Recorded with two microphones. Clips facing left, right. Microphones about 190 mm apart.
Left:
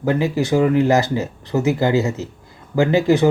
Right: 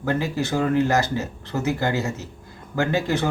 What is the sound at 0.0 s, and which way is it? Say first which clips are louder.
Speech: left 5 dB; 20° left (ahead or behind).